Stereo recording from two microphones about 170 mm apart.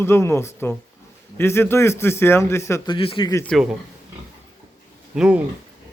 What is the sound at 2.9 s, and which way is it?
Speech, 30° left (ahead or behind).